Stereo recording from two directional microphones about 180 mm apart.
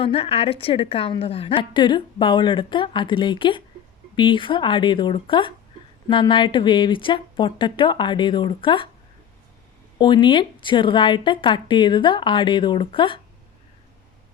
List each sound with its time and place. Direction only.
0.0 s a woman's voice: 30° left (ahead or behind)
10.0 s a woman's voice: 25° left (ahead or behind)